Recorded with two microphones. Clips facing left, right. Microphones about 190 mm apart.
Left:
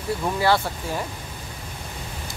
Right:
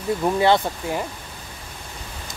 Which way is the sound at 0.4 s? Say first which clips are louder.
Right 2 dB; 20° right (ahead or behind).